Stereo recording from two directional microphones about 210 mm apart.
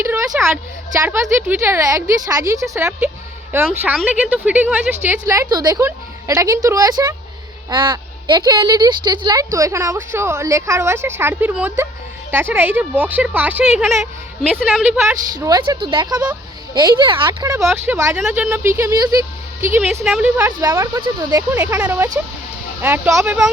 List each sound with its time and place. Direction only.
0.3 s a woman's voice: 10° right (ahead or behind)
15.4 s speech: 15° right (ahead or behind)